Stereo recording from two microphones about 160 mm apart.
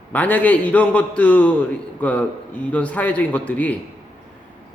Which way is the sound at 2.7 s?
10° left (ahead or behind).